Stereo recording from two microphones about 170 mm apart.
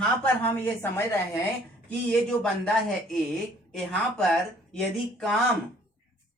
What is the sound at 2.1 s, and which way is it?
Speech, 5° left (ahead or behind).